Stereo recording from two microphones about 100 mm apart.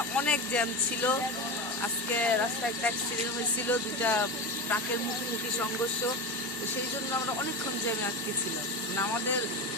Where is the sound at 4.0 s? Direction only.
15° left (ahead or behind).